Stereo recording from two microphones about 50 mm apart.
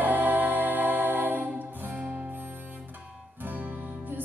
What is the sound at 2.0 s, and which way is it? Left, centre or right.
Music, right.